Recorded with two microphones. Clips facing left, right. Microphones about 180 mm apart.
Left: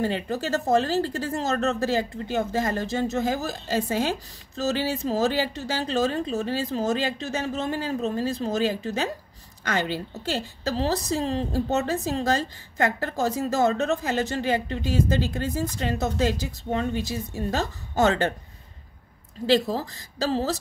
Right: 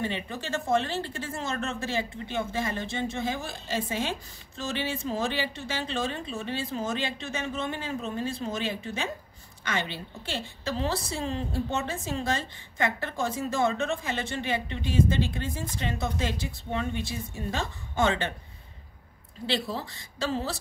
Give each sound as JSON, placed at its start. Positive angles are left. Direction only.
{"t": 0.0, "sound": "speech", "side_deg": 40}
{"t": 19.4, "sound": "speech", "side_deg": 45}